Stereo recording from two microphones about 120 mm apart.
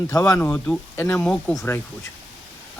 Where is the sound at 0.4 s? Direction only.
15° left (ahead or behind).